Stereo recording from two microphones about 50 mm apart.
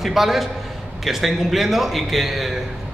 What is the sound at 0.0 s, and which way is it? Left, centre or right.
A man's voice, centre.